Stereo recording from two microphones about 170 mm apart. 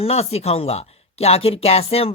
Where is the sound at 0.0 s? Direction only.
35° left (ahead or behind).